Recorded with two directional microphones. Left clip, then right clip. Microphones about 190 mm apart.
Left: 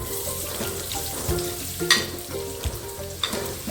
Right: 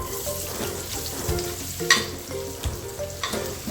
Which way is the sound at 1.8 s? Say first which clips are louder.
Even; 5° right (ahead or behind).